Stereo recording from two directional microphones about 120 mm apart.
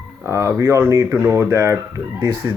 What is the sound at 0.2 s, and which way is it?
Speech, 25° right (ahead or behind).